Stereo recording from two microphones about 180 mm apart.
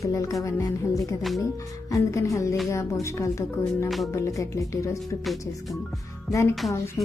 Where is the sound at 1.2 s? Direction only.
Centre (ahead or behind).